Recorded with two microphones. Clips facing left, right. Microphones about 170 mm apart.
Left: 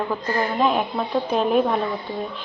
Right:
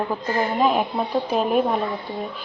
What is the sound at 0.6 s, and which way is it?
Speech, 5° right (ahead or behind).